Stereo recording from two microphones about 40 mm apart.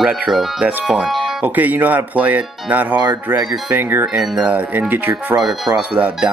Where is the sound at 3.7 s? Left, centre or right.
Right.